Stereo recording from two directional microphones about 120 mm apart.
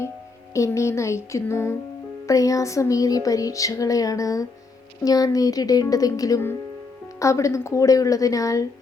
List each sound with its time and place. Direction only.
0.5 s music: 25° left (ahead or behind)
5.0 s a woman's voice: 30° left (ahead or behind)
7.2 s music: 25° left (ahead or behind)